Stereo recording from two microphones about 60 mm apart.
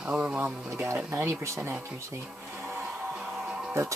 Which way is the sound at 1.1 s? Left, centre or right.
Right.